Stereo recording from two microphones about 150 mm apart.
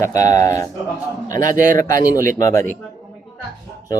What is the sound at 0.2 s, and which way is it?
Speech, 50° right (ahead or behind).